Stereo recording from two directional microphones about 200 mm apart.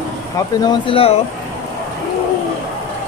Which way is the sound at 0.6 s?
25° left (ahead or behind).